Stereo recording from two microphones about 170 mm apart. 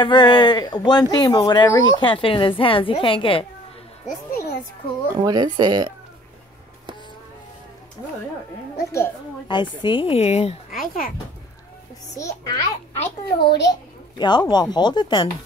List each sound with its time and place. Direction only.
0.0 s speech: 25° left (ahead or behind)
4.3 s music: 60° left (ahead or behind)
5.2 s speech: 25° right (ahead or behind)
8.7 s a woman's voice: 20° left (ahead or behind); by 10.6 s 35° left (ahead or behind)
10.8 s a child's voice: 55° left (ahead or behind)
12.2 s speech: 20° left (ahead or behind)
13.4 s a child's voice: 80° left
14.1 s speech: 25° left (ahead or behind)